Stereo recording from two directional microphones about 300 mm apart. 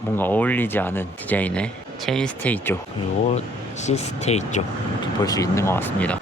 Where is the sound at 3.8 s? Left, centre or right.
Left.